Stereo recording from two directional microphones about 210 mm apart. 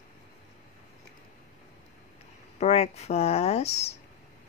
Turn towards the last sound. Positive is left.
turn(degrees=30)  # may be behind; listen again after turning